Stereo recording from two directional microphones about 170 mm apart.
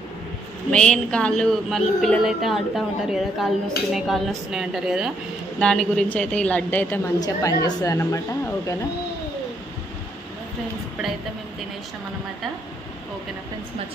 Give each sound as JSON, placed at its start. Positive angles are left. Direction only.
{"t": 0.7, "sound": "a woman's voice", "side_deg": 5}
{"t": 7.2, "sound": "a woman's voice", "side_deg": 25}